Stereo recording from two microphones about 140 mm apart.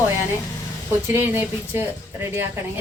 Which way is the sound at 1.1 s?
15° right (ahead or behind).